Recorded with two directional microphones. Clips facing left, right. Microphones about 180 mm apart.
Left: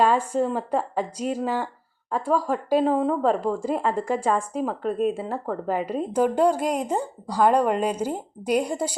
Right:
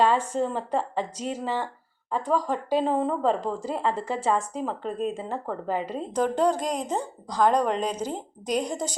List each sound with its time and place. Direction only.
0.0 s a woman's voice: 10° left (ahead or behind)